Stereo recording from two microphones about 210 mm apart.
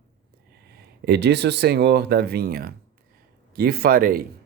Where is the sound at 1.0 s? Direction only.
50° right (ahead or behind).